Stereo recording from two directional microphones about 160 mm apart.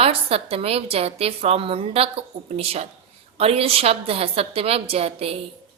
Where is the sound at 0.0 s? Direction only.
40° right (ahead or behind).